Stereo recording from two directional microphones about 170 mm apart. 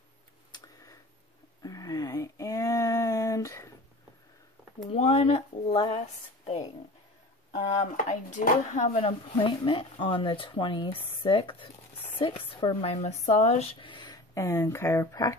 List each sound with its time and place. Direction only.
0.5 s a sound: 25° left (ahead or behind)
4.9 s speech: 35° left (ahead or behind)
7.7 s speech: 45° left (ahead or behind); by 15.3 s 20° left (ahead or behind)